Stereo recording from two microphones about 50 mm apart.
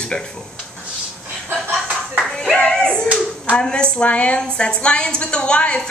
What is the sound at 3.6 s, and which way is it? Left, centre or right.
A man's voice, centre.